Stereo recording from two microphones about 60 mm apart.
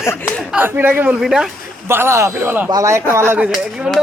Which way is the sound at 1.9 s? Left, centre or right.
Right.